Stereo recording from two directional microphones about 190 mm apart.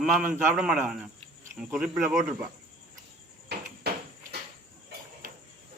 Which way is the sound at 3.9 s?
55° right (ahead or behind).